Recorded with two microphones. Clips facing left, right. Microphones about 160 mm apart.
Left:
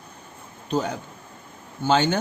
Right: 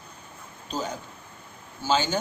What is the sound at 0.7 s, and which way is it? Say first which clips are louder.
A man's voice: left 6 dB; 60° left (ahead or behind).